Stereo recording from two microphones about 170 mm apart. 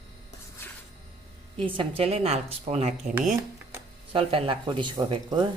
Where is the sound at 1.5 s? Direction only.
30° right (ahead or behind).